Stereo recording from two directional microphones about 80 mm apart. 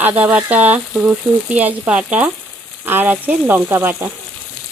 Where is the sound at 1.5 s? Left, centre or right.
Right.